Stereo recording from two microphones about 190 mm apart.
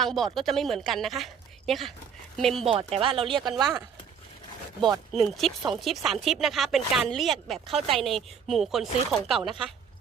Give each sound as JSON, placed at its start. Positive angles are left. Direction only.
{"t": 0.0, "sound": "speech", "side_deg": 0}
{"t": 2.6, "sound": "speech", "side_deg": -30}
{"t": 5.1, "sound": "speech", "side_deg": 0}